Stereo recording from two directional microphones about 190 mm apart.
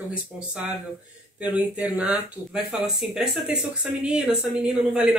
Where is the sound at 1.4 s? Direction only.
5° right (ahead or behind).